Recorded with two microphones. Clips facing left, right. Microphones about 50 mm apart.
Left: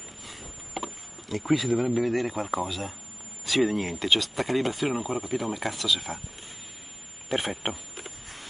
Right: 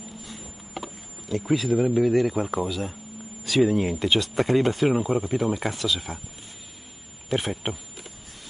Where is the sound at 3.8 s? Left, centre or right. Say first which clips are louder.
Right 3 dB; centre.